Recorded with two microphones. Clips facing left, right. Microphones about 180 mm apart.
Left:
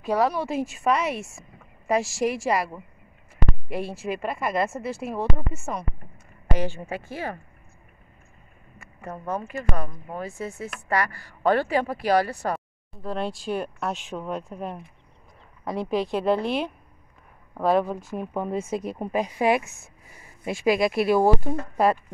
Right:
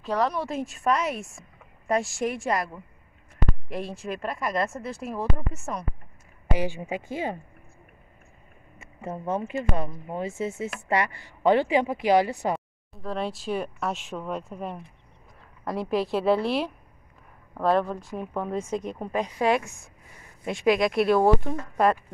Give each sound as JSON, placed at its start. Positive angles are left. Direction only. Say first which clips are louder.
{"t": 0.0, "sound": "speech", "louder": "left 3 dB", "side_deg": 10}
{"t": 6.4, "sound": "speech", "louder": "even", "side_deg": -10}
{"t": 8.7, "sound": "a sound", "louder": "right 2 dB", "side_deg": -25}
{"t": 9.5, "sound": "speech", "louder": "right 2 dB", "side_deg": -25}
{"t": 12.5, "sound": "speech", "louder": "right 1 dB", "side_deg": 0}